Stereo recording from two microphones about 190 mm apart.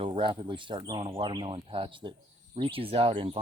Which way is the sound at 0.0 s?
25° right (ahead or behind).